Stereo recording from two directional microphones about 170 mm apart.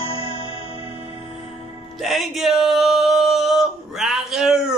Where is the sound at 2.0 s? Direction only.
Centre (ahead or behind).